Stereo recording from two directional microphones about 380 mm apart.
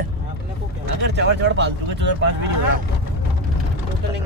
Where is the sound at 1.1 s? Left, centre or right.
Right.